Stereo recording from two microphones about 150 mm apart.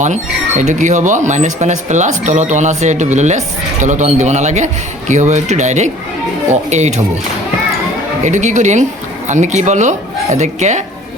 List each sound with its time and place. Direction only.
0.0 s speech: 55° right (ahead or behind)
8.2 s speech: 50° right (ahead or behind)